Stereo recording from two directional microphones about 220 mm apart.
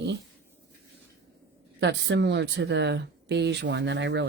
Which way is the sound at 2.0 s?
50° right (ahead or behind).